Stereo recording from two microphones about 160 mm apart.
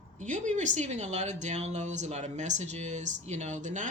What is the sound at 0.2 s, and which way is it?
Speech, 50° right (ahead or behind).